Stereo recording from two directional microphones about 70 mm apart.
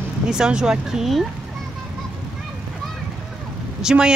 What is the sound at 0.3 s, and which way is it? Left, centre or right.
Speech, centre.